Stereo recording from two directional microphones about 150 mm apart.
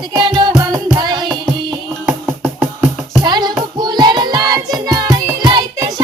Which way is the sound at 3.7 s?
30° right (ahead or behind).